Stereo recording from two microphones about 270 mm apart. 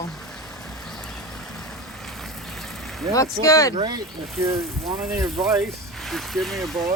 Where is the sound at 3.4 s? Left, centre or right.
Centre.